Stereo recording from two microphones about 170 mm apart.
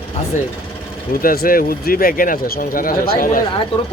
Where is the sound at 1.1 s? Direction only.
60° left (ahead or behind).